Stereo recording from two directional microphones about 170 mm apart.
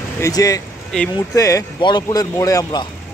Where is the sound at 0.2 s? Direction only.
20° left (ahead or behind).